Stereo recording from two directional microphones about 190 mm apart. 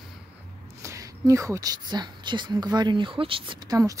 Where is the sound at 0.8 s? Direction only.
15° right (ahead or behind).